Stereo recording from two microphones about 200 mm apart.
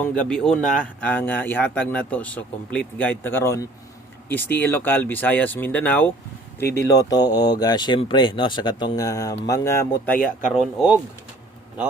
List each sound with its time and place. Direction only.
0.0 s speech: 5° left (ahead or behind)
10.5 s speech: 5° right (ahead or behind)